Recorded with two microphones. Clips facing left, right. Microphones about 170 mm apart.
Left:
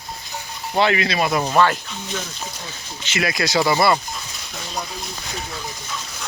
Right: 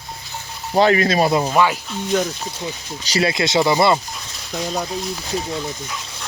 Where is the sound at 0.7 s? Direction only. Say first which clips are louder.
Right 4 dB; 40° right (ahead or behind).